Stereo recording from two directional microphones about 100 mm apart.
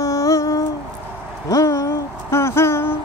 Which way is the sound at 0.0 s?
30° left (ahead or behind).